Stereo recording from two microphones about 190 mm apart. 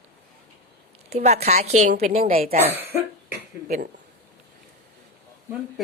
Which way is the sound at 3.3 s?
50° right (ahead or behind).